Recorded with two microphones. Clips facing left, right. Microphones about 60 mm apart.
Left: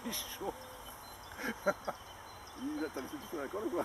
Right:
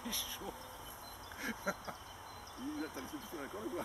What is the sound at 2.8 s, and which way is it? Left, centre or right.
Speech, centre.